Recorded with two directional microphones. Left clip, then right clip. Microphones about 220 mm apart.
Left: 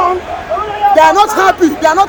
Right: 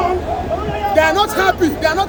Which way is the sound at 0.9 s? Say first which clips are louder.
Left 6 dB; centre (ahead or behind).